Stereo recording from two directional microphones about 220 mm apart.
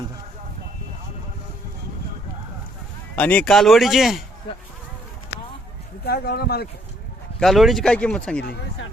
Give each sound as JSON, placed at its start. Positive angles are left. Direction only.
{"t": 3.2, "sound": "speech", "side_deg": 5}
{"t": 6.1, "sound": "speech", "side_deg": 45}
{"t": 7.3, "sound": "speech", "side_deg": 0}
{"t": 8.4, "sound": "speech", "side_deg": 50}